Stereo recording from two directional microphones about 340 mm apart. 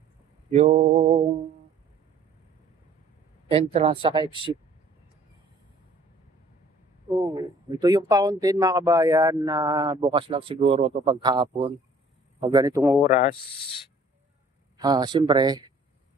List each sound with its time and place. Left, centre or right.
0.5 s mantra: centre
3.5 s speech: centre
7.2 s speech: centre
13.1 s speech: left
14.8 s speech: centre